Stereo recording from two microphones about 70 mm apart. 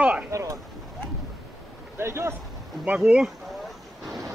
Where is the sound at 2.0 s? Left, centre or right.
Right.